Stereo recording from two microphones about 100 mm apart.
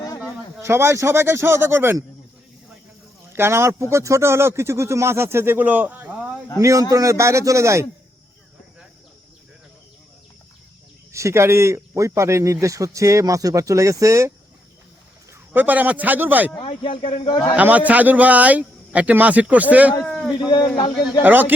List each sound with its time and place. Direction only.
0.6 s speech: 25° right (ahead or behind)
3.3 s speech: 25° right (ahead or behind)
6.6 s a man's voice: 35° right (ahead or behind)
11.1 s a man's voice: 30° right (ahead or behind)
15.5 s speech: 15° right (ahead or behind)
16.6 s speech: 60° left (ahead or behind)
17.6 s speech: 15° right (ahead or behind)
20.1 s speech: 5° left (ahead or behind)
20.4 s speech: 45° left (ahead or behind)
21.2 s speech: 20° right (ahead or behind)